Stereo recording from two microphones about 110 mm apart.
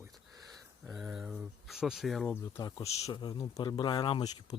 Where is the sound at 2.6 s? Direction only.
40° left (ahead or behind).